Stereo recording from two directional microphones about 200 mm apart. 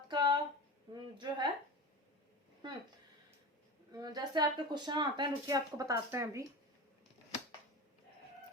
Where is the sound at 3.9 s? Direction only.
20° right (ahead or behind).